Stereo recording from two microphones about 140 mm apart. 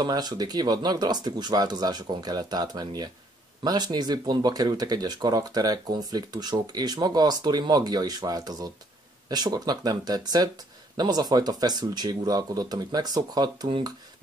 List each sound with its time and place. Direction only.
0.0 s speech: 30° right (ahead or behind)